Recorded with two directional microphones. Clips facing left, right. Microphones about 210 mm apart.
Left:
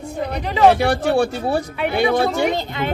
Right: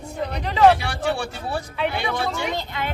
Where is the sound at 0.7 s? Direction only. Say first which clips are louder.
Left 5 dB; 45° left (ahead or behind).